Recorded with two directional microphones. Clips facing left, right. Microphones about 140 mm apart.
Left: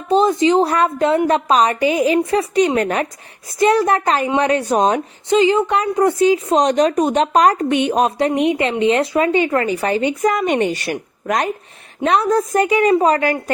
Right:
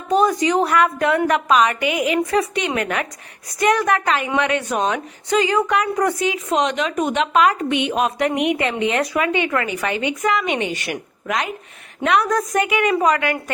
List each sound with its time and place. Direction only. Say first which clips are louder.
0.1 s a woman's voice: left 3 dB; 25° left (ahead or behind)
5.3 s a woman's voice: left 4 dB; 25° left (ahead or behind); by 11.5 s 40° left (ahead or behind)
12.0 s a woman's voice: left 3 dB; 30° left (ahead or behind)